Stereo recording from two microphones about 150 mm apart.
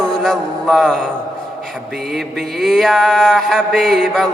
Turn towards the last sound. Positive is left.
turn(degrees=0)  # may be behind; listen again after turning